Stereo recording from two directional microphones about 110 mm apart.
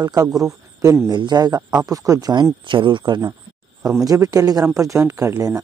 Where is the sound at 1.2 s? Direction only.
40° right (ahead or behind).